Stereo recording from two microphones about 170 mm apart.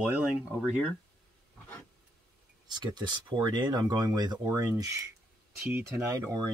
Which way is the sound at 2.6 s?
25° right (ahead or behind).